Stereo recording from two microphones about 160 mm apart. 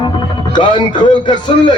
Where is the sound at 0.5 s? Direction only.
30° left (ahead or behind).